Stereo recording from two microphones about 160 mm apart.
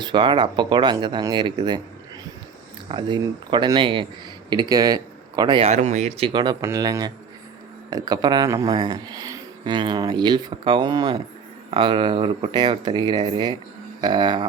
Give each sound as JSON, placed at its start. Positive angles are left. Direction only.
{"t": 0.0, "sound": "speech", "side_deg": -30}
{"t": 2.9, "sound": "speech", "side_deg": -30}
{"t": 5.6, "sound": "speech", "side_deg": -45}
{"t": 6.3, "sound": "speech", "side_deg": -25}